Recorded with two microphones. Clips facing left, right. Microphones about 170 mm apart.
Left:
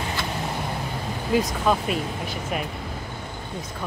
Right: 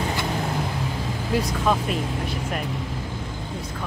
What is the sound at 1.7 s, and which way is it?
Speech, centre (ahead or behind).